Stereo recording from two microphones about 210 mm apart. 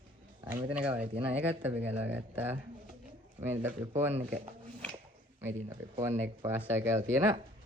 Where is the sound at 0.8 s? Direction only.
5° right (ahead or behind).